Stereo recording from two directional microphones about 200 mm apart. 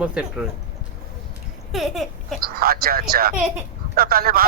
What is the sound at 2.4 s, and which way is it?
A man's voice, 50° right (ahead or behind).